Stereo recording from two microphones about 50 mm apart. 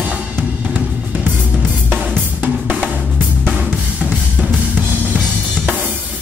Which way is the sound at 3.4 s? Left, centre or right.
Centre.